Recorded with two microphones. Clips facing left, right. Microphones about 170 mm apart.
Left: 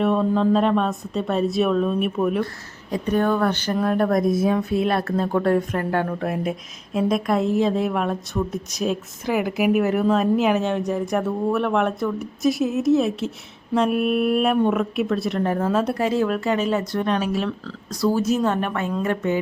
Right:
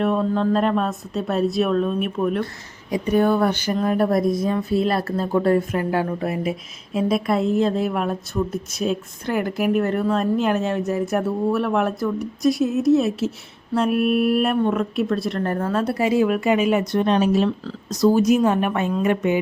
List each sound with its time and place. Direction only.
0.0 s speech: centre (ahead or behind)
2.9 s speech: 10° right (ahead or behind)